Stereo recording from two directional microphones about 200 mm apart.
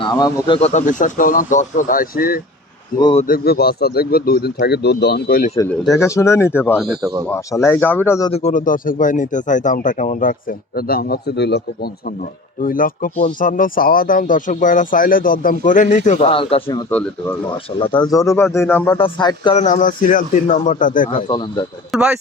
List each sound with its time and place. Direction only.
0.0 s speech: 25° left (ahead or behind); by 2.4 s 45° left (ahead or behind)
3.0 s a man's voice: 25° left (ahead or behind)
3.2 s speech: 50° left (ahead or behind)
5.5 s speech: 15° left (ahead or behind)
7.0 s speech: 15° right (ahead or behind)
7.3 s speech: 15° left (ahead or behind)
8.3 s speech: 35° left (ahead or behind); by 11.9 s 55° left (ahead or behind)
12.6 s speech: 45° left (ahead or behind); by 16.8 s 25° left (ahead or behind)
16.9 s speech: 5° left (ahead or behind)
18.0 s speech: 15° left (ahead or behind)
18.9 s a man's voice: 25° left (ahead or behind)
19.5 s speech: 40° left (ahead or behind)
21.2 s a man's voice: 20° left (ahead or behind)
21.9 s speech: 5° right (ahead or behind)